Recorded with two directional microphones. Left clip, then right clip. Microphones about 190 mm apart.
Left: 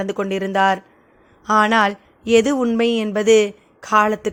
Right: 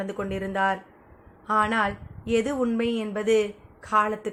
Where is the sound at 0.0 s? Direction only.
50° left (ahead or behind).